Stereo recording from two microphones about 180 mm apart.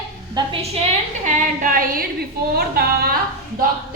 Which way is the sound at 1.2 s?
45° right (ahead or behind).